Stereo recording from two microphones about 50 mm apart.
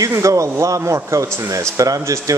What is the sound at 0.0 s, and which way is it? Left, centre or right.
Speech, right.